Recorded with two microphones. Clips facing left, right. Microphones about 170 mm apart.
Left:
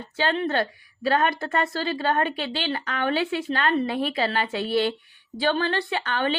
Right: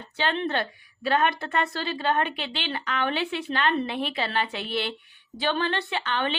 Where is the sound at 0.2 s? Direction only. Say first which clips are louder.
Left 3 dB; 40° left (ahead or behind).